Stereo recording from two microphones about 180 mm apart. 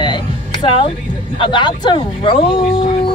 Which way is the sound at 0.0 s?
25° left (ahead or behind).